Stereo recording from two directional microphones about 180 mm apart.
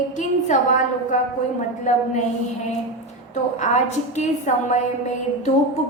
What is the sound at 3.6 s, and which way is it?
A woman's voice, 40° left (ahead or behind).